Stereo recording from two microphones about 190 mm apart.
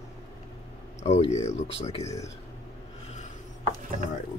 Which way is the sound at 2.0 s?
15° left (ahead or behind).